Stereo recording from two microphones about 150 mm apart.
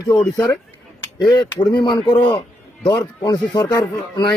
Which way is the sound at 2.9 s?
25° left (ahead or behind).